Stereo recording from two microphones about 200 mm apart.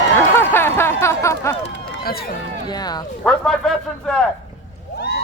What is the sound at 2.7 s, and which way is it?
Speech, 20° left (ahead or behind).